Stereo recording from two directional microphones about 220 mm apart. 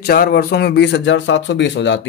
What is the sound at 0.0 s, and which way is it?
Speech, 45° left (ahead or behind).